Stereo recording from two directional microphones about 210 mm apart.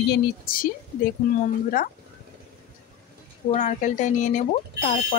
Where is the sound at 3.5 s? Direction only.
35° left (ahead or behind).